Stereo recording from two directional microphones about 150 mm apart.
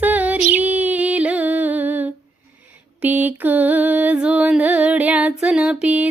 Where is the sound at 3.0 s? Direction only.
10° right (ahead or behind).